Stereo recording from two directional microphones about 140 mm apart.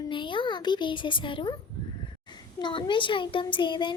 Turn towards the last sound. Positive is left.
turn(degrees=35)  # may be behind; listen again after turning